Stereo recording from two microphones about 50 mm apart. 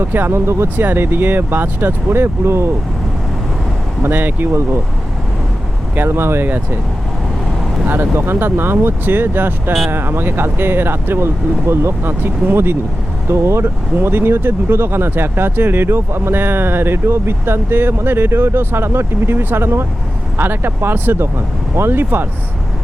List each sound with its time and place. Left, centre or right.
0.1 s speech: right
0.3 s speech: right
0.9 s speech: right
2.0 s speech: right
4.0 s speech: right
6.0 s speech: right
7.9 s speech: right
11.7 s speech: right
13.2 s speech: right